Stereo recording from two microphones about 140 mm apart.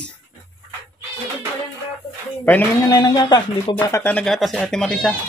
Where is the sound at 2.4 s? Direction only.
10° left (ahead or behind).